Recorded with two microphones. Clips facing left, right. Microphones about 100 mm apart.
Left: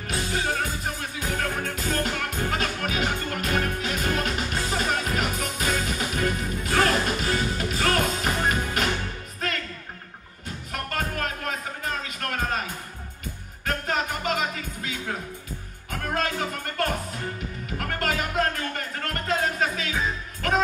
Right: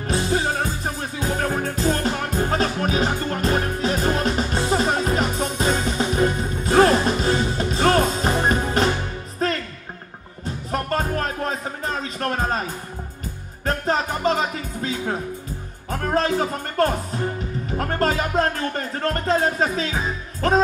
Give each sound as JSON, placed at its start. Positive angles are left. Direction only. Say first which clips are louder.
{"t": 0.0, "sound": "music", "louder": "right 6 dB", "side_deg": -30}
{"t": 10.7, "sound": "music", "louder": "right 7 dB", "side_deg": -30}